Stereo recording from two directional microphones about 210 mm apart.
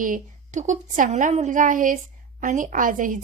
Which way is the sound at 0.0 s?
40° right (ahead or behind).